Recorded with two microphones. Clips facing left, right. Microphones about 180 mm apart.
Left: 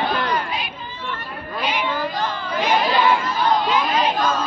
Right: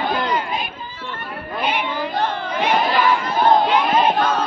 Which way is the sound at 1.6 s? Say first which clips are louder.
Even; 55° right (ahead or behind).